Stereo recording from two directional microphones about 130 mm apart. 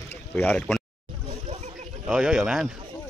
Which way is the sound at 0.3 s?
10° left (ahead or behind).